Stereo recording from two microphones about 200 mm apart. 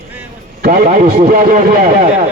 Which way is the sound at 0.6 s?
45° right (ahead or behind).